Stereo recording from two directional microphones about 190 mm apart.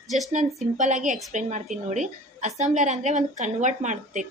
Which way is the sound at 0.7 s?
40° right (ahead or behind).